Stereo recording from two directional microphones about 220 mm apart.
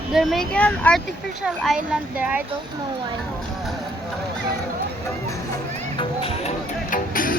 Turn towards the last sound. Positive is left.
turn(degrees=40)  # may be behind; listen again after turning